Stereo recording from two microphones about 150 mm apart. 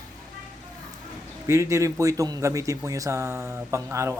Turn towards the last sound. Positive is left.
turn(degrees=-20)  # may be behind; listen again after turning